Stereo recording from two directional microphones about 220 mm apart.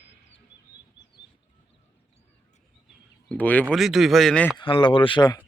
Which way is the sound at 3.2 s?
5° left (ahead or behind).